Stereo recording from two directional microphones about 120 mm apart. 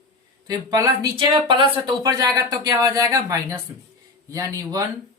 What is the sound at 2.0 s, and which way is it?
Speech, 30° right (ahead or behind).